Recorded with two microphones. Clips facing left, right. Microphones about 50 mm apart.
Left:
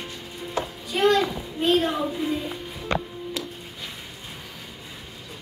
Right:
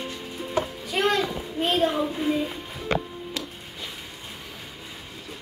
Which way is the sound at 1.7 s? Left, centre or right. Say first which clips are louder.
Left 1 dB; right.